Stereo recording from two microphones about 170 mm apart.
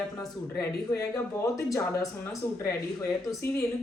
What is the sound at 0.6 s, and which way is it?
Speech, 20° left (ahead or behind).